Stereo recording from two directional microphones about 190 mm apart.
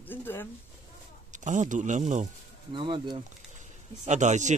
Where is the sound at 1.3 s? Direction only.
40° right (ahead or behind).